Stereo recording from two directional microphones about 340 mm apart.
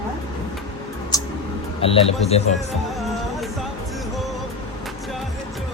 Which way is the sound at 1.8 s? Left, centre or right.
Centre.